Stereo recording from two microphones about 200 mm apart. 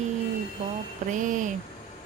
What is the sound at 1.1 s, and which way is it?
Speech, 40° right (ahead or behind).